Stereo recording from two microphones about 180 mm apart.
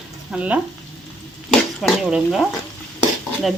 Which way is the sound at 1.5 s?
Centre (ahead or behind).